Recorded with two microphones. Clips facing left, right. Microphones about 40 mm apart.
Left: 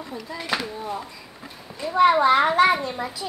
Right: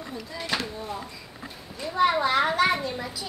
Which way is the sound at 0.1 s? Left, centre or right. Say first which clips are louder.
Left 3 dB; centre.